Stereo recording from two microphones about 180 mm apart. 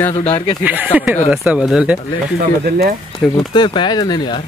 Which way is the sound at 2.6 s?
60° right (ahead or behind).